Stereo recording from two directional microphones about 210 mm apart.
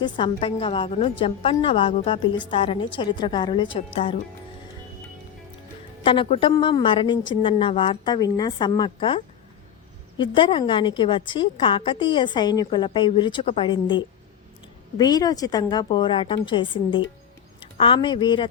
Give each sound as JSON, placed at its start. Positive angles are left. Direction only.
{"t": 0.0, "sound": "a woman's voice", "side_deg": 25}
{"t": 6.1, "sound": "a woman's voice", "side_deg": 25}